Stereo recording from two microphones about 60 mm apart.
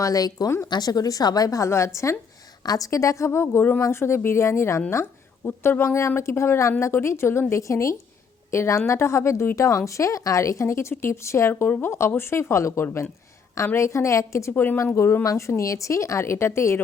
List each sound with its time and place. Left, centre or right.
0.0 s a woman's voice: left
2.6 s speech: left
5.5 s speech: left
14.5 s speech: left
14.9 s speech: left